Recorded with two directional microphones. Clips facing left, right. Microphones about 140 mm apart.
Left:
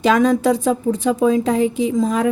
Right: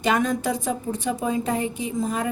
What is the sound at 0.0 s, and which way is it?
A woman's voice, 90° left.